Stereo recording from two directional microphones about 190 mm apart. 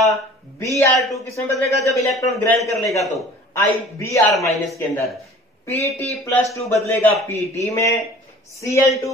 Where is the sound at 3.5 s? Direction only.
15° left (ahead or behind).